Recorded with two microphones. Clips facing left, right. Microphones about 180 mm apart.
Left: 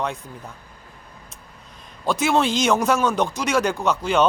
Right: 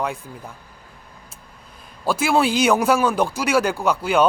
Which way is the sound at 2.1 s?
5° right (ahead or behind).